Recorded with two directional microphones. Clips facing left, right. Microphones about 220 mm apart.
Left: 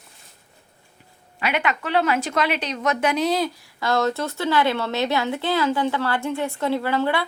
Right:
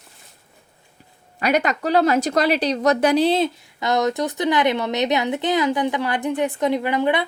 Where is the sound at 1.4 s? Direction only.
40° right (ahead or behind).